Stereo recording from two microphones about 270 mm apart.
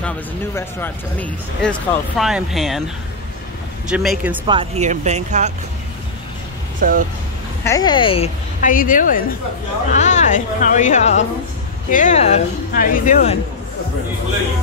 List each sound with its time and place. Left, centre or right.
0.6 s speech: centre
3.9 s speech: centre
4.5 s speech: right
6.8 s speech: right
7.6 s a woman's voice: centre